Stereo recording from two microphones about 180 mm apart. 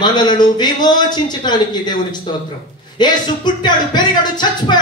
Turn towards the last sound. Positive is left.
turn(degrees=25)  # may be behind; listen again after turning